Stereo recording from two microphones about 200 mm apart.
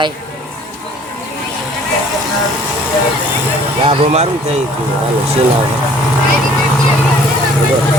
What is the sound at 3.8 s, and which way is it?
Speech, 30° right (ahead or behind).